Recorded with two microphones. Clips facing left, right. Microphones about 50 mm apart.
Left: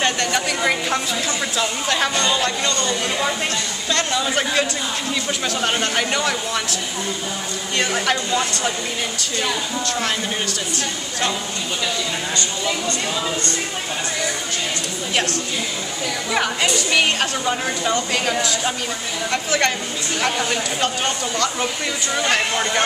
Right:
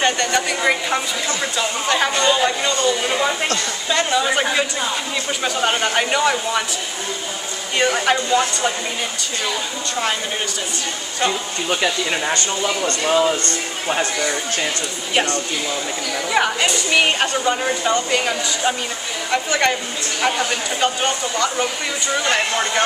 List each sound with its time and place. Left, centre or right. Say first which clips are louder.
0.0 s a woman's voice: right 2 dB; centre
8.0 s a woman's voice: right 3 dB; centre
12.8 s speech: right 6 dB; right
15.1 s a woman's voice: right 3 dB; centre